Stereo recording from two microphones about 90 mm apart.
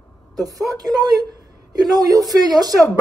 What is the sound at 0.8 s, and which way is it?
A woman's voice, 45° right (ahead or behind).